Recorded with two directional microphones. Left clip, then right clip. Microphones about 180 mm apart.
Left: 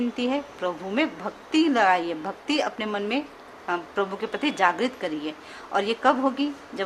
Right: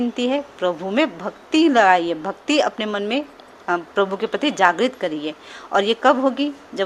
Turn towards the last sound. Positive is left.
turn(degrees=-30)  # may be behind; listen again after turning